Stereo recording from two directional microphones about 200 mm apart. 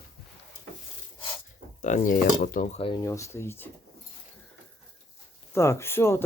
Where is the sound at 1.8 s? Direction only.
40° left (ahead or behind).